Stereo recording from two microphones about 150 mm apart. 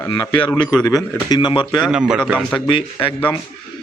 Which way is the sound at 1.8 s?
5° right (ahead or behind).